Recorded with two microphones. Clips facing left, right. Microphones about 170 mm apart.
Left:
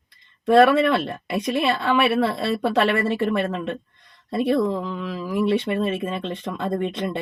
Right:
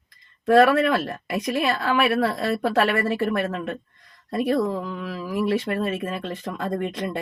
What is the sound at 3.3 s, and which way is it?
Speech, 25° left (ahead or behind).